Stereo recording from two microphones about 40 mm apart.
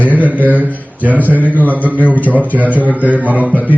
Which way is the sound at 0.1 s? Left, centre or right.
Right.